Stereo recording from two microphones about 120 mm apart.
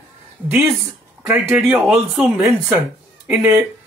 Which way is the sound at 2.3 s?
20° right (ahead or behind).